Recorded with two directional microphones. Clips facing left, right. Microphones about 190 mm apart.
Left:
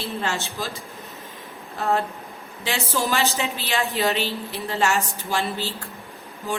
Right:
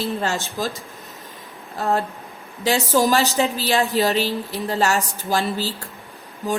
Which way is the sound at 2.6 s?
40° right (ahead or behind).